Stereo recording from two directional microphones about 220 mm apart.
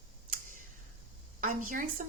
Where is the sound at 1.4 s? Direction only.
35° right (ahead or behind).